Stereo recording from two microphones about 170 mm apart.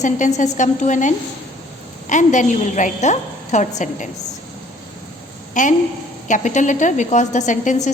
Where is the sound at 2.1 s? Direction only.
45° left (ahead or behind).